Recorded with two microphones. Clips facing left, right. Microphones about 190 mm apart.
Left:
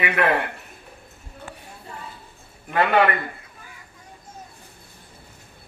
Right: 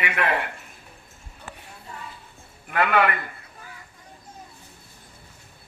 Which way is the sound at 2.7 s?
30° left (ahead or behind).